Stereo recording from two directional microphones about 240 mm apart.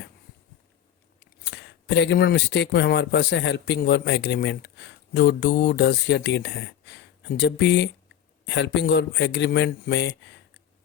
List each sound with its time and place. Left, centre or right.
1.5 s speech: left